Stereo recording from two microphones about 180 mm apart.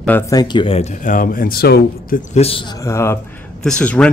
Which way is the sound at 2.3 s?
35° left (ahead or behind).